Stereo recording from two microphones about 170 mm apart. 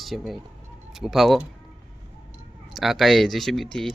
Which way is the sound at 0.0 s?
Centre (ahead or behind).